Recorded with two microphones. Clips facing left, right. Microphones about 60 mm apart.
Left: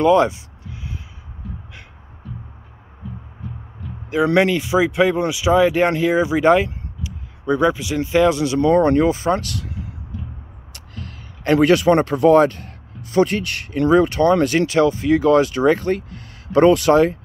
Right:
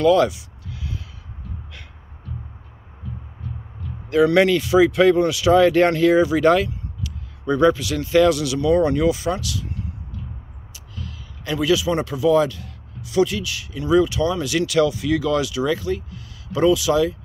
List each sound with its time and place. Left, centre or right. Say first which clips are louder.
0.0 s music: left 1 dB; left
3.0 s heart sounds: left 1 dB; centre
4.1 s speech: right 1 dB; left
10.1 s music: left 6 dB; centre
10.7 s a man's voice: left 1 dB; left